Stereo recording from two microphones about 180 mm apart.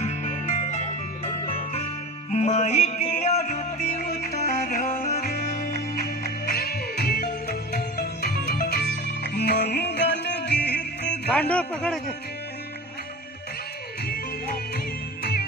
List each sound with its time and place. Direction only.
0.0 s music: 40° left (ahead or behind)
4.0 s music: 60° left (ahead or behind)
11.2 s speech: 5° left (ahead or behind)
14.0 s music: 60° left (ahead or behind)